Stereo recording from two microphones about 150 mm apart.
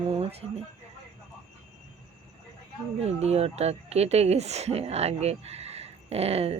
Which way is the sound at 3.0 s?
45° right (ahead or behind).